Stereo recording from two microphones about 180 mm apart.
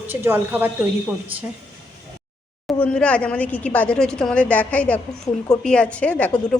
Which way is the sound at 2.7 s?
5° left (ahead or behind).